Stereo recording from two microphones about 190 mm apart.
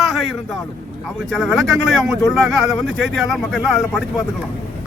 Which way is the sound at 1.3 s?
Centre (ahead or behind).